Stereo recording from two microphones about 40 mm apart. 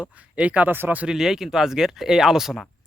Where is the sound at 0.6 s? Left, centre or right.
Right.